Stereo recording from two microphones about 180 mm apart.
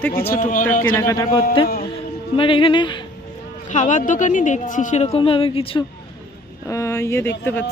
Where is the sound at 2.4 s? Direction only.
30° left (ahead or behind).